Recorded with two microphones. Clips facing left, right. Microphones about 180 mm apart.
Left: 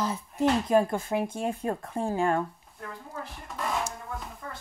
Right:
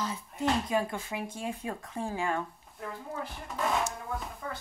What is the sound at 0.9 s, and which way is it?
Speech, 50° left (ahead or behind).